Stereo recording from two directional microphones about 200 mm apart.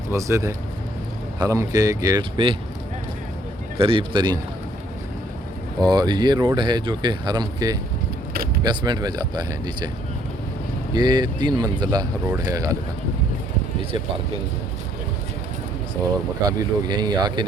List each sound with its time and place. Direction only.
0.1 s speech: 15° right (ahead or behind)
3.8 s speech: 25° right (ahead or behind)
5.8 s speech: 20° right (ahead or behind)
10.9 s speech: 20° right (ahead or behind)
16.5 s speech: 20° right (ahead or behind)